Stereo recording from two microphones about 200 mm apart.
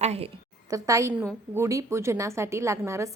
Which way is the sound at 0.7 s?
15° right (ahead or behind).